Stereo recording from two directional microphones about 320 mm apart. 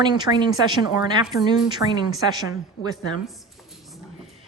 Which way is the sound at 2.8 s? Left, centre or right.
Left.